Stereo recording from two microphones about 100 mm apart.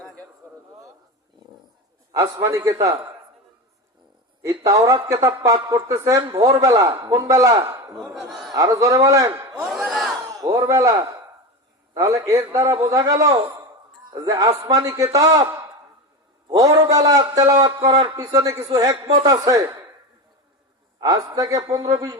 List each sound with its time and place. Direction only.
2.1 s a man's voice: 35° right (ahead or behind)
4.4 s a man's voice: 35° right (ahead or behind)
7.9 s speech: centre (ahead or behind)
8.5 s a man's voice: 35° right (ahead or behind)
9.7 s crowd: centre (ahead or behind)
10.4 s a man's voice: 40° right (ahead or behind)
11.9 s a man's voice: 30° right (ahead or behind)
21.0 s a man's voice: 40° right (ahead or behind)